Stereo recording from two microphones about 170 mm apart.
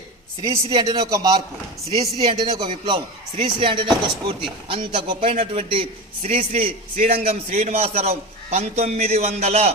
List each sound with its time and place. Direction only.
0.5 s a man's voice: 20° right (ahead or behind); by 9.7 s 40° right (ahead or behind)